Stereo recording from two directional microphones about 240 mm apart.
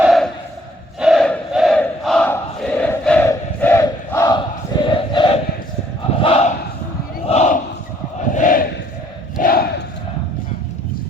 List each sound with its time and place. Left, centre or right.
0.0 s crowd: centre
4.9 s battle cry: left
8.3 s crowd: left
9.4 s battle cry: left